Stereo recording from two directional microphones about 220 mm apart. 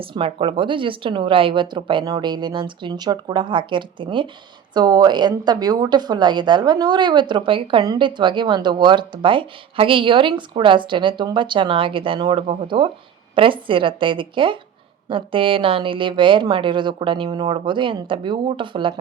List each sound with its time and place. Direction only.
0.0 s a woman's voice: 25° right (ahead or behind)